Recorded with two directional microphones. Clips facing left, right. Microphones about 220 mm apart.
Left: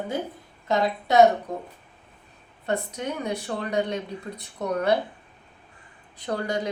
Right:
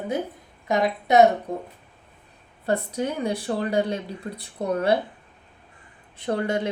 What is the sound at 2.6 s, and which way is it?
Speech, 35° right (ahead or behind).